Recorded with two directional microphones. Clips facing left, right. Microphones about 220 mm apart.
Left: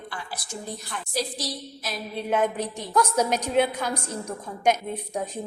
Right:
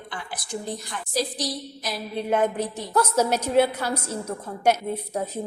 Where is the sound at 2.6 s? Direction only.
5° right (ahead or behind).